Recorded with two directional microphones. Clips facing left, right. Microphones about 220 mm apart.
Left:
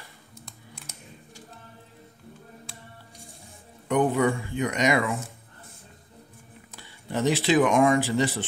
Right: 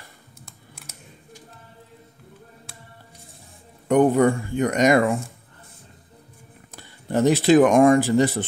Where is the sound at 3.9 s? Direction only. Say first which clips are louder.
Right 6 dB; 45° right (ahead or behind).